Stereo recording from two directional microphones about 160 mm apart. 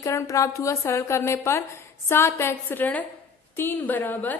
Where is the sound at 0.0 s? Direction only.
20° left (ahead or behind).